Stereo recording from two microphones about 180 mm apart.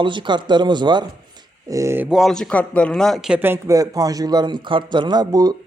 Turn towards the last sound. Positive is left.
turn(degrees=-20)  # may be behind; listen again after turning